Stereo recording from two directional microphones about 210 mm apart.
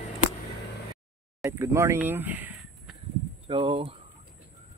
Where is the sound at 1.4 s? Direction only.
15° right (ahead or behind).